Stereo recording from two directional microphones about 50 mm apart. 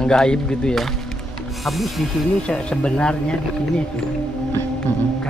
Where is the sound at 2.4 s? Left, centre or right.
Centre.